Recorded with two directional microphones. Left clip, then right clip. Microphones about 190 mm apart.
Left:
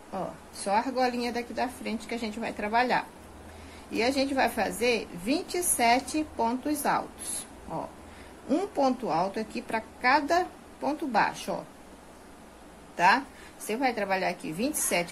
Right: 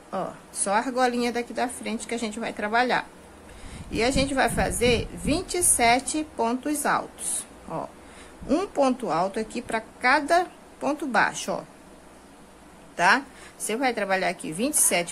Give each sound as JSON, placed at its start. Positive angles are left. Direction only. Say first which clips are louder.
{"t": 0.1, "sound": "a woman's voice", "louder": "right 4 dB", "side_deg": -20}
{"t": 8.5, "sound": "a woman's voice", "louder": "right 3 dB", "side_deg": -20}
{"t": 12.9, "sound": "a woman's voice", "louder": "right 2 dB", "side_deg": -15}